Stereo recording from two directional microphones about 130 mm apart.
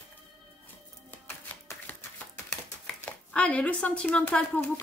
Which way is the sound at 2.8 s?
10° left (ahead or behind).